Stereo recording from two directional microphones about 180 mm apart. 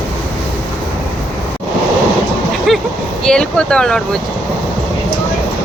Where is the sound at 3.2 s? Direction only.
5° left (ahead or behind).